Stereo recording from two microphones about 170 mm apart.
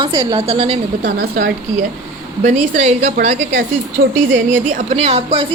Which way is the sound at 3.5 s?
90° right.